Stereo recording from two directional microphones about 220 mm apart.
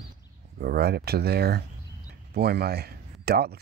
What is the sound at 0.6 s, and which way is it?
Speech, 45° right (ahead or behind).